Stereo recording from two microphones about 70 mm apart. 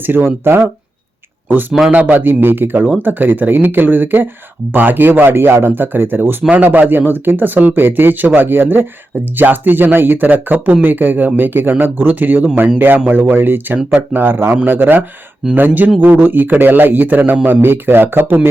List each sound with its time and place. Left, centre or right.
0.0 s speech: right
1.9 s speech: right